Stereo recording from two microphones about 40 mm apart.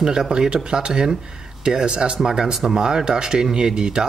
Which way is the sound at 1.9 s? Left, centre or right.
Right.